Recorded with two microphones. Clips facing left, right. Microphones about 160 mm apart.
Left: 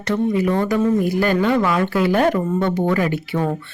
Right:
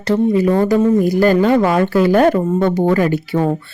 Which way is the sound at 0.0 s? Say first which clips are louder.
Right 5 dB; 30° right (ahead or behind).